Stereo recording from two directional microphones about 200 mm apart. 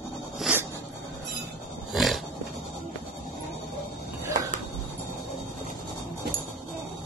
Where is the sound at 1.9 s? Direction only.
Centre (ahead or behind).